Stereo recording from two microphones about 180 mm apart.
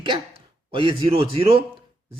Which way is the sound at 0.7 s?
30° right (ahead or behind).